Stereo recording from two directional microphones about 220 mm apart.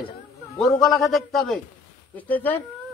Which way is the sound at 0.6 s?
Centre (ahead or behind).